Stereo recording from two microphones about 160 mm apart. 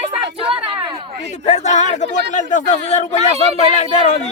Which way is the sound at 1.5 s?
45° left (ahead or behind).